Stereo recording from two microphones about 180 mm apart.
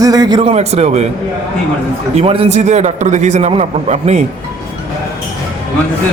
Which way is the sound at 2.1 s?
35° right (ahead or behind).